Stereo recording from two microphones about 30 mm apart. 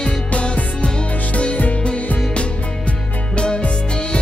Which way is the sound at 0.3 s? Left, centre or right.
Left.